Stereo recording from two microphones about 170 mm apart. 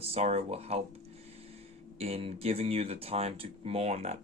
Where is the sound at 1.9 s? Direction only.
35° right (ahead or behind).